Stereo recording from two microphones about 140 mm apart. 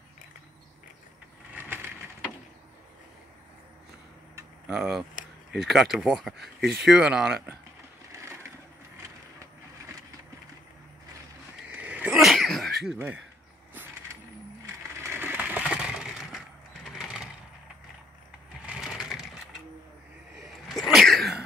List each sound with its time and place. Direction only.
1.5 s a sound: 15° right (ahead or behind)
4.6 s speech: 5° right (ahead or behind)
8.1 s crushing: 20° right (ahead or behind)
11.7 s sneeze: 10° right (ahead or behind)
15.0 s crushing: 15° right (ahead or behind)
16.9 s a sound: centre (ahead or behind)
18.7 s crushing: centre (ahead or behind)
20.6 s sneeze: centre (ahead or behind)